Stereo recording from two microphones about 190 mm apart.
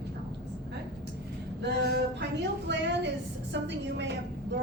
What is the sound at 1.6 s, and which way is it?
A woman's voice, 60° right (ahead or behind).